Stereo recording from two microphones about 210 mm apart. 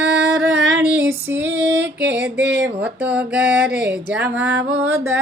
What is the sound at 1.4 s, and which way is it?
Female singing, 60° right (ahead or behind).